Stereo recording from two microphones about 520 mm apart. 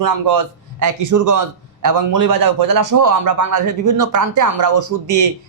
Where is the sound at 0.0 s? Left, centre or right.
Right.